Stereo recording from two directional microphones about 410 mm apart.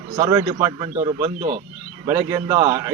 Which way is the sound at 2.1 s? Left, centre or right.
Centre.